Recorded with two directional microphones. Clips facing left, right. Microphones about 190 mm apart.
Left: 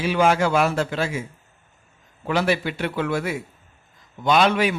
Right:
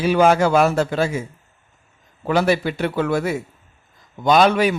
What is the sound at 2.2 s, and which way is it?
Speech, 40° right (ahead or behind).